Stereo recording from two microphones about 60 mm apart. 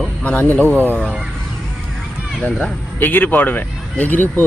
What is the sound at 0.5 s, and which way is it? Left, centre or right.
Speech, left.